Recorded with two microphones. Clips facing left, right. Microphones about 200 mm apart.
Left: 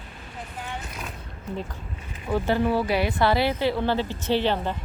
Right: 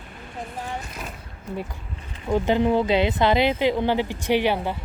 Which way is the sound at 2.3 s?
20° right (ahead or behind).